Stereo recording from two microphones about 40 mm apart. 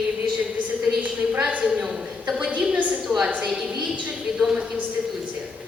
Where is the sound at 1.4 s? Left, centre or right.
Right.